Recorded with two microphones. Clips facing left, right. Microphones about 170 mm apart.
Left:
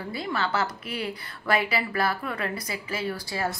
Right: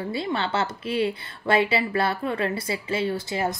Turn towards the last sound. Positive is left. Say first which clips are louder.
# right 4 dB
turn(degrees=-20)  # may be behind; listen again after turning